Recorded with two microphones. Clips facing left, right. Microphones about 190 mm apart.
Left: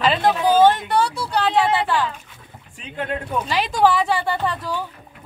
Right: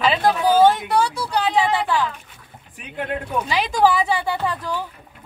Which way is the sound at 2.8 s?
15° right (ahead or behind).